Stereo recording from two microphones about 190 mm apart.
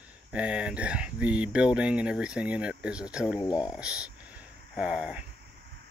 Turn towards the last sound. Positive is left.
turn(degrees=-5)  # may be behind; listen again after turning